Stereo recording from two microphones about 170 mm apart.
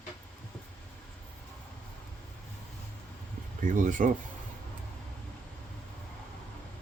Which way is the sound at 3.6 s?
50° right (ahead or behind).